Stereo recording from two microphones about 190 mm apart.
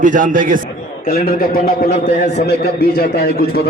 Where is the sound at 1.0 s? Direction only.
50° left (ahead or behind).